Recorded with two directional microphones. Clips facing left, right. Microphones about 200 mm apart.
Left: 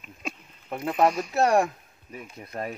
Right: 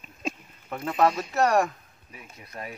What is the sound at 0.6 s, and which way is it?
Speech, 15° left (ahead or behind).